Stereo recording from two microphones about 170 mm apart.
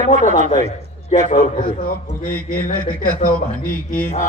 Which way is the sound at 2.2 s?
50° left (ahead or behind).